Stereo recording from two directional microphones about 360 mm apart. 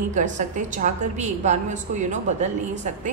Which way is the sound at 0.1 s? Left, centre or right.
Centre.